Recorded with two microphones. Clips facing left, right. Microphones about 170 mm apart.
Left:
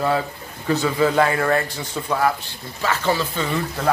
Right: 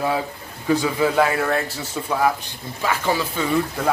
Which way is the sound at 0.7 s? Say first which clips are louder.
Even; 10° right (ahead or behind).